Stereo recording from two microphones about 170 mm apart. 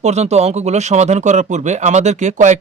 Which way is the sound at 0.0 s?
40° right (ahead or behind).